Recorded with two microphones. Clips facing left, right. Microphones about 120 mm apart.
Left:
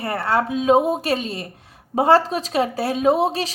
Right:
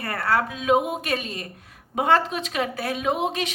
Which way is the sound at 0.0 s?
25° left (ahead or behind).